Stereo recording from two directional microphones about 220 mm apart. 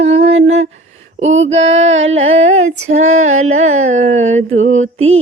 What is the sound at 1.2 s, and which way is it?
Child singing, 60° right (ahead or behind).